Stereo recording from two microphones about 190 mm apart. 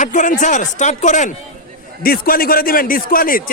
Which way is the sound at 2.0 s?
50° left (ahead or behind).